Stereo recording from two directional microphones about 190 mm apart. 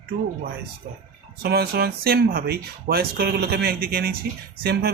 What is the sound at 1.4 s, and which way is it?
Speech, 55° right (ahead or behind).